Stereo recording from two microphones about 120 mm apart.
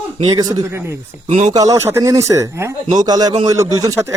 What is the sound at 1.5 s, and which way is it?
A man's voice, 30° right (ahead or behind).